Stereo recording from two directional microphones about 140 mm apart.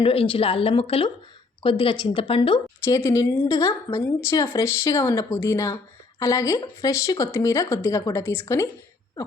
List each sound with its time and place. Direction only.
0.0 s speech: 40° left (ahead or behind)
2.8 s speech: 20° left (ahead or behind)